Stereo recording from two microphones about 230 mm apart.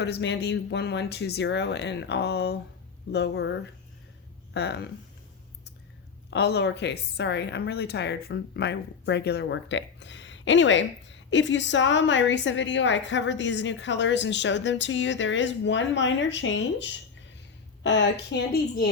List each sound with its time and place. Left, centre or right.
0.0 s a woman's voice: left
6.3 s a woman's voice: left